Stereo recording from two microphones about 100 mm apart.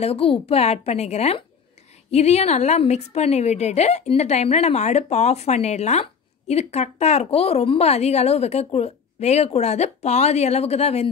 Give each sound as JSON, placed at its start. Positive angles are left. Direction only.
{"t": 0.0, "sound": "a woman's voice", "side_deg": 80}